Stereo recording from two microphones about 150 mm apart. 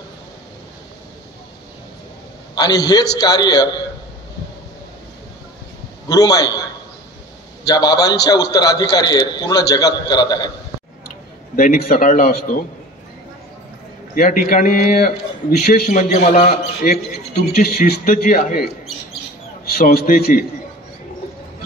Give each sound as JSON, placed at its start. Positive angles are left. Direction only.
{"t": 2.5, "sound": "a man's voice", "side_deg": 25}
{"t": 6.0, "sound": "a man's voice", "side_deg": 25}
{"t": 7.6, "sound": "a man's voice", "side_deg": 25}
{"t": 11.5, "sound": "a man's voice", "side_deg": 70}
{"t": 14.1, "sound": "a man's voice", "side_deg": 75}
{"t": 15.9, "sound": "a man's voice", "side_deg": 55}
{"t": 16.4, "sound": "a man's voice", "side_deg": 85}
{"t": 19.6, "sound": "a man's voice", "side_deg": 90}